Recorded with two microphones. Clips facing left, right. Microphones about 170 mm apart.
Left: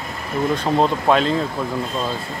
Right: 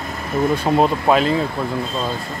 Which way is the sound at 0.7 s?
5° right (ahead or behind).